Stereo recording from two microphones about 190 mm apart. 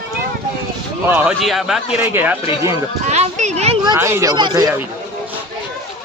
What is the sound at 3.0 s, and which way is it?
Speech, 35° right (ahead or behind).